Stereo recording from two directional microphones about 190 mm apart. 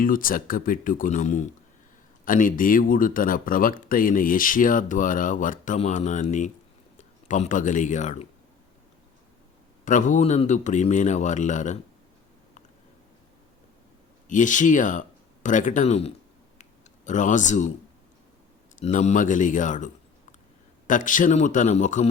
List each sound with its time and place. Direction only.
0.0 s a man's voice: 45° left (ahead or behind)
9.8 s a man's voice: 40° left (ahead or behind)
14.3 s a man's voice: 40° left (ahead or behind)
18.8 s a man's voice: 40° left (ahead or behind)